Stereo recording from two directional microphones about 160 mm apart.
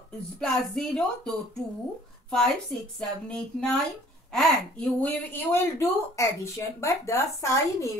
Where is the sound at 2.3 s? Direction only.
5° left (ahead or behind).